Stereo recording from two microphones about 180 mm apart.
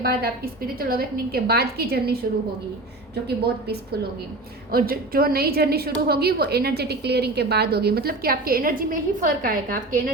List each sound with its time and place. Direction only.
0.0 s a woman's voice: 60° right (ahead or behind)
3.2 s a woman's voice: 65° right (ahead or behind)